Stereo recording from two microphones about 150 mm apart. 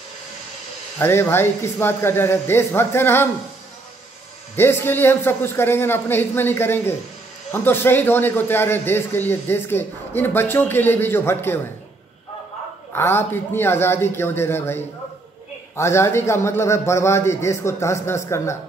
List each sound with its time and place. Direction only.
0.9 s a man's voice: 15° left (ahead or behind)
4.6 s a man's voice: 15° left (ahead or behind)
12.9 s a man's voice: 15° left (ahead or behind)